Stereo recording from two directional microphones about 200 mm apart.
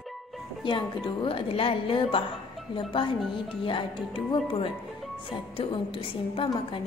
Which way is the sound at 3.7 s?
25° left (ahead or behind).